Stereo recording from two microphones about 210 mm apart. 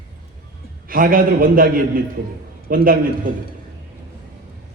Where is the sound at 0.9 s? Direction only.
45° right (ahead or behind).